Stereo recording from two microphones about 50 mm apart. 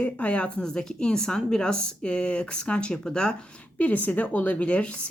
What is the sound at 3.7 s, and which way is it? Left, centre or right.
Speech, left.